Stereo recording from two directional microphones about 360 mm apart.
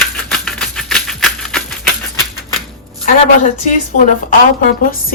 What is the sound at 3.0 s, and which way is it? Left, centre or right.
A woman's voice, left.